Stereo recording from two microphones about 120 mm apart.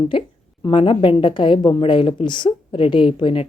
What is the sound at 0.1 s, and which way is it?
Speech, 45° left (ahead or behind).